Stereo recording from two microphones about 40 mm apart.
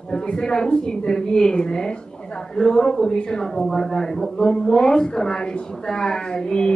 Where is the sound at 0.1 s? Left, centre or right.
Centre.